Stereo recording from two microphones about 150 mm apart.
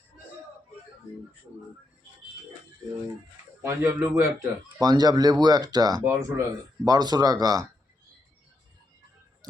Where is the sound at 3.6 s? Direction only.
20° right (ahead or behind).